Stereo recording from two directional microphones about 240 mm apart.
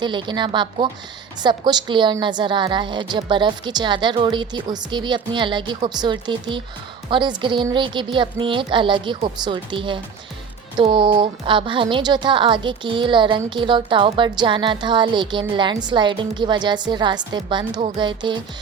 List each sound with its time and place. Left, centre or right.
0.0 s a woman's voice: centre